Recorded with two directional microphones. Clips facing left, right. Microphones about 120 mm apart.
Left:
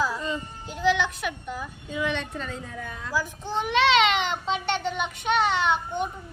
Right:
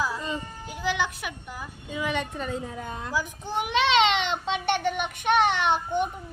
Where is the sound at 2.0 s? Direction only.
10° right (ahead or behind).